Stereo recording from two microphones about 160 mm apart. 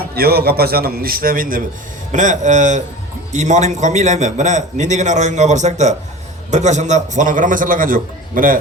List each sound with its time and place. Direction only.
0.0 s a man's voice: 75° right (ahead or behind)
2.1 s a man's voice: 50° right (ahead or behind)